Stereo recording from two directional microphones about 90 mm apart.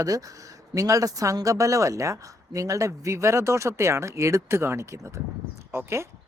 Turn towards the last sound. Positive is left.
turn(degrees=-30)  # may be behind; listen again after turning